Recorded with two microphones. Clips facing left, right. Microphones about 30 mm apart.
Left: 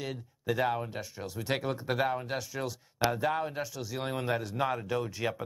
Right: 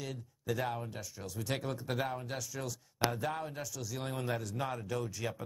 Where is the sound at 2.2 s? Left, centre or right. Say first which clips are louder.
Left 5 dB; left.